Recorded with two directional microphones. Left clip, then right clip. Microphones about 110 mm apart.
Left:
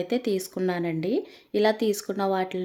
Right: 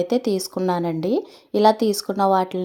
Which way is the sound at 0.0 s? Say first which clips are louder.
Right 5 dB; 30° right (ahead or behind).